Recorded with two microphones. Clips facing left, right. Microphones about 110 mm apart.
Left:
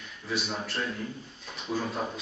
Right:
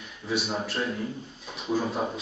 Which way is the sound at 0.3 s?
Centre (ahead or behind).